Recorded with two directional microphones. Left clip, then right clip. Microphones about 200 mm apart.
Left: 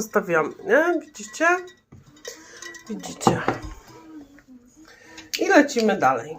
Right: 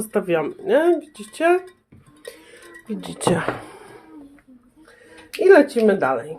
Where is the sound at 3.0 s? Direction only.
40° right (ahead or behind).